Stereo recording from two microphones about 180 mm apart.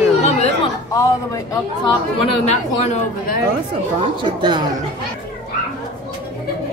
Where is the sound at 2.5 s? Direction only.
40° left (ahead or behind).